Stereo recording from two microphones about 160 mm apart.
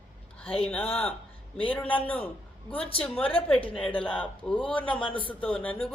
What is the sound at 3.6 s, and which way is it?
Speech, 35° left (ahead or behind).